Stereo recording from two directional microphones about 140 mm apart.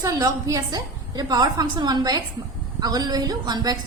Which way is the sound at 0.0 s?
25° right (ahead or behind).